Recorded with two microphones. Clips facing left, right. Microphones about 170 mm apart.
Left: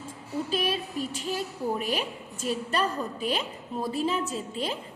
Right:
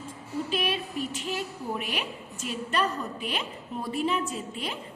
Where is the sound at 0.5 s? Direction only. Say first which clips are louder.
Left 1 dB; 40° left (ahead or behind).